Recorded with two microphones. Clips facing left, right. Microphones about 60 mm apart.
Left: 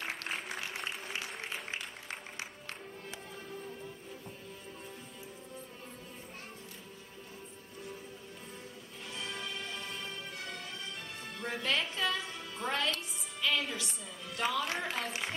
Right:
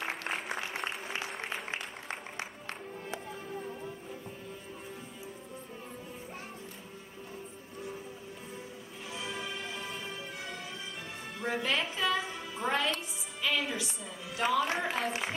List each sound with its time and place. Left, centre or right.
0.0 s applause: centre
1.1 s applause: right
9.1 s music: centre
11.3 s a woman's voice: centre
12.3 s music: centre